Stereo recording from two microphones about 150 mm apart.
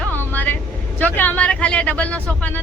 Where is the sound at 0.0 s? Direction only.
10° left (ahead or behind).